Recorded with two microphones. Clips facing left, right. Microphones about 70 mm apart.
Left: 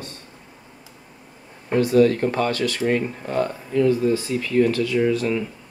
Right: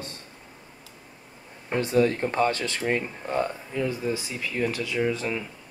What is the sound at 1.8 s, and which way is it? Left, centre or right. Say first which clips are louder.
Speech: left 6 dB; right.